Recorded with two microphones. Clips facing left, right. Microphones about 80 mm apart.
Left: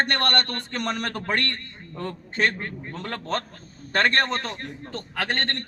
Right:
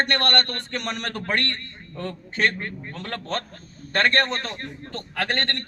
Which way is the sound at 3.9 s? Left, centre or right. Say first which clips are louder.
Even; centre.